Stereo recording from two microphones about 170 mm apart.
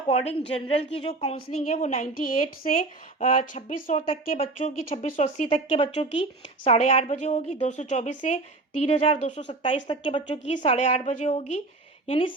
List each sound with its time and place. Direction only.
0.1 s a woman's voice: 35° left (ahead or behind)
3.9 s a woman's voice: 35° left (ahead or behind)
9.8 s a woman's voice: 30° left (ahead or behind)